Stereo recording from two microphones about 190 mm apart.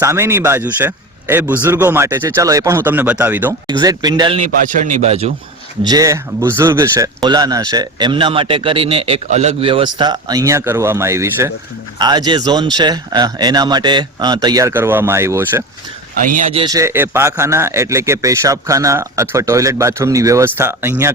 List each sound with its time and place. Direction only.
0.0 s a man's voice: 15° right (ahead or behind)
3.7 s speech: 20° right (ahead or behind)
4.4 s a man's voice: 40° right (ahead or behind)
5.8 s a man's voice: 20° right (ahead or behind)
16.2 s speech: 45° right (ahead or behind)
16.5 s speech: 30° right (ahead or behind)
16.7 s a man's voice: 15° right (ahead or behind)